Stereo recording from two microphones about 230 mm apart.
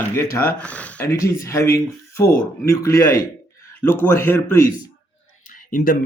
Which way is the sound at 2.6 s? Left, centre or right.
Centre.